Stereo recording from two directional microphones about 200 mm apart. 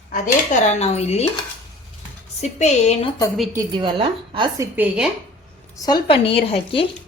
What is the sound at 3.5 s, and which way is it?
Speech, 20° right (ahead or behind).